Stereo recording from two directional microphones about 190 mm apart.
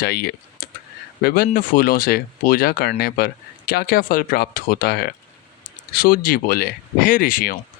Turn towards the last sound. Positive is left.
turn(degrees=50)  # may be behind; listen again after turning